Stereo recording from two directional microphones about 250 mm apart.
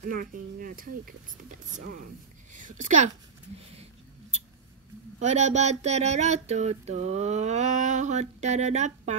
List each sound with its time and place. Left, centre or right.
0.1 s speech: right
2.6 s speech: right
5.2 s female singing: right